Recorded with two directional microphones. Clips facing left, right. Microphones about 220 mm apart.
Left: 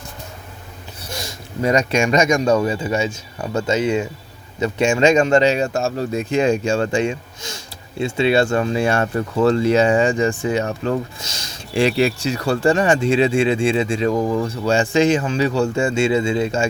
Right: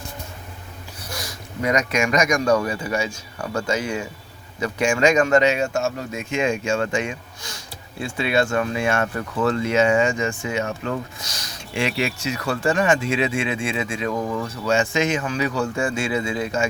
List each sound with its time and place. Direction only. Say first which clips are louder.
1.1 s speech: left 3 dB; 25° left (ahead or behind)